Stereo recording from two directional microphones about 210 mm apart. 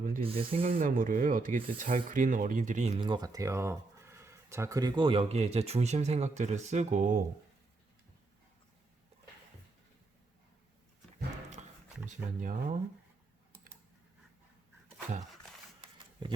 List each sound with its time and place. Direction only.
0.2 s speech: 25° right (ahead or behind)
0.7 s speech: 40° right (ahead or behind)
3.0 s speech: 20° right (ahead or behind); by 7.3 s 35° right (ahead or behind)
11.6 s a sound: 30° right (ahead or behind)
12.0 s speech: 40° right (ahead or behind)